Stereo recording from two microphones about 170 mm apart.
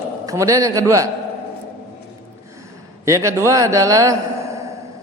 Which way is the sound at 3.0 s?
20° right (ahead or behind).